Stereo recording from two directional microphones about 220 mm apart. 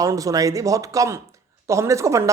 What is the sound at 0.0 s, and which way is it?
A man's voice, 15° right (ahead or behind).